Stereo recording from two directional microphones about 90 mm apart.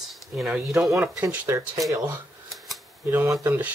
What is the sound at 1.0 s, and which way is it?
Speech, 15° right (ahead or behind).